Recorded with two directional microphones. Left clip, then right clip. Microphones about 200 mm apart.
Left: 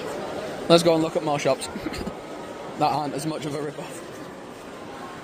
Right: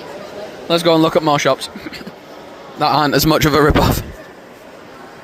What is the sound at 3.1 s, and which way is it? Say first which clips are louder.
Speech: right 17 dB; 35° right (ahead or behind).